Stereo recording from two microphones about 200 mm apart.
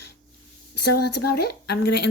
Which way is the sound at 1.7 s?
55° left (ahead or behind).